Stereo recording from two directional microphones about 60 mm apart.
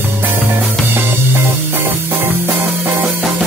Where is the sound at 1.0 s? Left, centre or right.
Right.